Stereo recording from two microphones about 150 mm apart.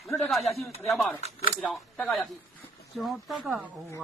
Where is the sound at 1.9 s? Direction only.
5° left (ahead or behind).